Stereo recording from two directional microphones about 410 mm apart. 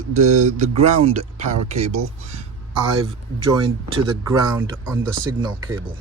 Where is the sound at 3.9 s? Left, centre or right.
Centre.